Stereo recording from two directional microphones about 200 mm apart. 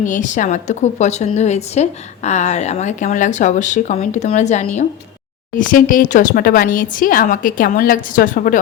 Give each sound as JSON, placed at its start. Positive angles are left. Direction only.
{"t": 0.0, "sound": "a woman's voice", "side_deg": 40}